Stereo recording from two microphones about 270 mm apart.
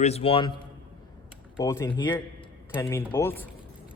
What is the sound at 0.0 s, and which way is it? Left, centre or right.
A man's voice, left.